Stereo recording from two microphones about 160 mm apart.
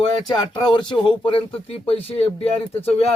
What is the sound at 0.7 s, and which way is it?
Speech, 30° left (ahead or behind).